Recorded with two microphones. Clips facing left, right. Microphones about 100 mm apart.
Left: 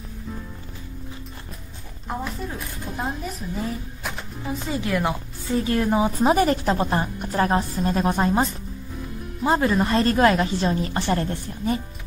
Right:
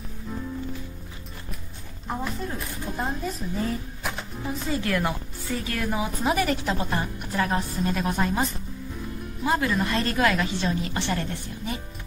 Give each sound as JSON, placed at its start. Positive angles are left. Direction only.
{"t": 2.0, "sound": "speech", "side_deg": 5}
{"t": 3.5, "sound": "a sound", "side_deg": 0}
{"t": 4.5, "sound": "a woman's voice", "side_deg": 20}